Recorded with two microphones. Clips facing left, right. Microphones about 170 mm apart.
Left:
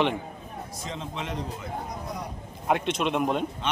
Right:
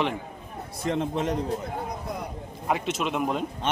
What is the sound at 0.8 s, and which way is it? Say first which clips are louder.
Speech: right 10 dB; 60° right (ahead or behind).